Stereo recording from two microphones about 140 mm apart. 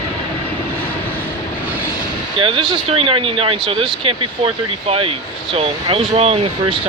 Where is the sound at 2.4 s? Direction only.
40° right (ahead or behind).